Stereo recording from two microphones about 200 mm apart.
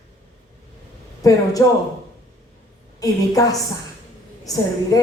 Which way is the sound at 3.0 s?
15° left (ahead or behind).